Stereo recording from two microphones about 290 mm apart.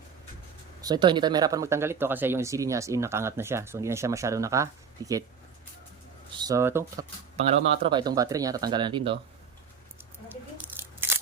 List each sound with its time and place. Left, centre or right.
0.8 s speech: centre
6.5 s speech: centre